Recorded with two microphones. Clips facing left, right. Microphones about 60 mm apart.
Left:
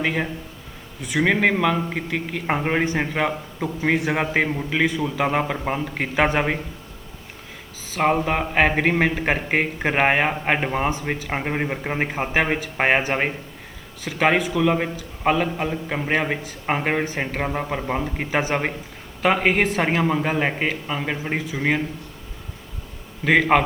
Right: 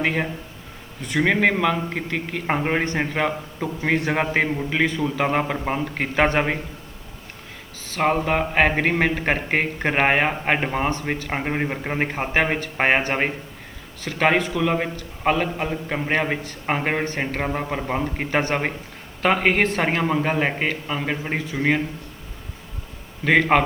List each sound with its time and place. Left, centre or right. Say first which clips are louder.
0.0 s a man's voice: right 1 dB; centre
7.9 s a man's voice: even; centre
14.0 s a man's voice: even; centre
23.2 s a man's voice: even; centre